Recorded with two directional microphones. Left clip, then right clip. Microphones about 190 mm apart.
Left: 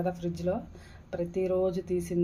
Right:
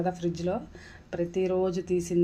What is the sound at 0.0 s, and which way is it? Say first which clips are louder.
Speech: right 2 dB; 25° right (ahead or behind).